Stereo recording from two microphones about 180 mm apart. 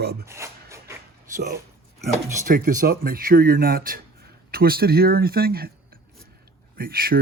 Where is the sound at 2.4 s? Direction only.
50° right (ahead or behind).